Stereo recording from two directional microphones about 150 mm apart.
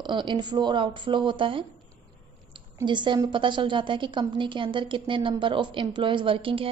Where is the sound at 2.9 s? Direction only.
30° right (ahead or behind).